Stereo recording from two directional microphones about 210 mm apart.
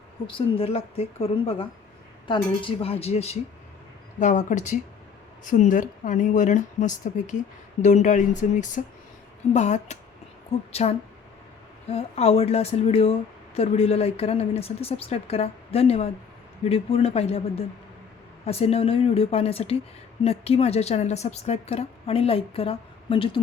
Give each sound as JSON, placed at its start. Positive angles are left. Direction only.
{"t": 0.3, "sound": "speech", "side_deg": 25}